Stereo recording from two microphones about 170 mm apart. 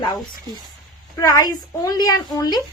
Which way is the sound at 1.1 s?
20° left (ahead or behind).